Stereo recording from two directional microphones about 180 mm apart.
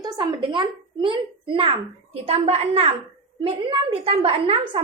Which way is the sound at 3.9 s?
30° right (ahead or behind).